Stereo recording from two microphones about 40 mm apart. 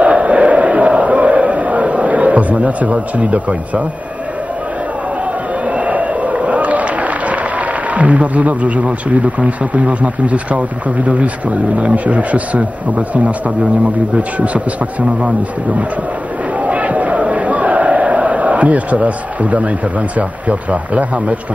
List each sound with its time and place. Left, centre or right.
0.0 s a sound: right
5.7 s a sound: right
7.9 s speech: right
11.8 s speech: right
14.4 s speech: right
16.6 s crowd: right
20.2 s speech: right